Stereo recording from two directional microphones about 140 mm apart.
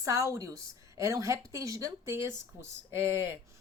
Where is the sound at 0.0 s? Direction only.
20° right (ahead or behind).